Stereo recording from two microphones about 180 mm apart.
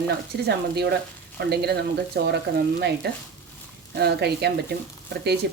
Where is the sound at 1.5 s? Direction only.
65° right (ahead or behind).